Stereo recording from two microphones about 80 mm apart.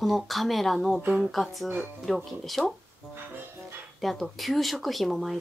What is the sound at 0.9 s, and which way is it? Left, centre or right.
Speech, centre.